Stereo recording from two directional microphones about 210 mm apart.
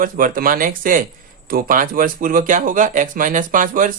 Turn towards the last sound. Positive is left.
turn(degrees=-40)  # may be behind; listen again after turning